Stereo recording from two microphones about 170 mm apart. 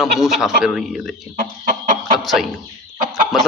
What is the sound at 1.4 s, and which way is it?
Chicken, 50° right (ahead or behind).